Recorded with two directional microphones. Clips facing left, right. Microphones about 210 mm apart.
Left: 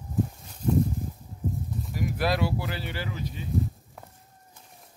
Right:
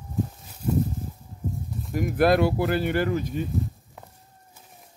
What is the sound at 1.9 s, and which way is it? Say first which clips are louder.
Speech: right 8 dB; 50° right (ahead or behind).